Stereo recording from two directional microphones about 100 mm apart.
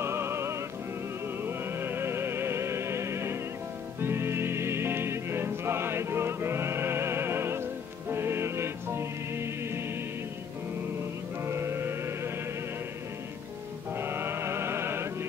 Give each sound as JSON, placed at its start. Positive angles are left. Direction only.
{"t": 0.0, "sound": "music", "side_deg": -25}
{"t": 11.4, "sound": "music", "side_deg": -25}
{"t": 13.9, "sound": "music", "side_deg": -25}